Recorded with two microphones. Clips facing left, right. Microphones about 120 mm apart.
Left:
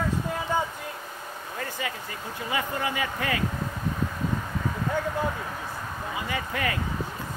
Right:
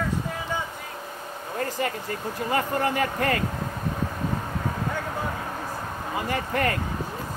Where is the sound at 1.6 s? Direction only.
45° right (ahead or behind).